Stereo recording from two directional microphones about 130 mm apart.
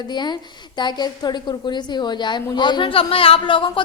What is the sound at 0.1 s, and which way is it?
A woman's voice, 35° left (ahead or behind).